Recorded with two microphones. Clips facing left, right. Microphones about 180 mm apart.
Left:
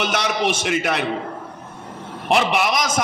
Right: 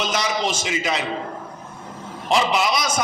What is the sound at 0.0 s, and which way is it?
A man's voice, 60° left (ahead or behind).